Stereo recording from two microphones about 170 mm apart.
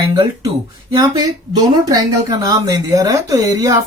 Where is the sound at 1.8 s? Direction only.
20° right (ahead or behind).